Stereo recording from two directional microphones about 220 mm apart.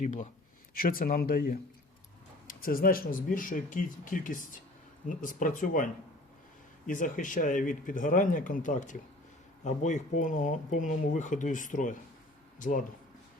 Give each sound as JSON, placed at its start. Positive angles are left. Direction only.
{"t": 0.0, "sound": "speech", "side_deg": 35}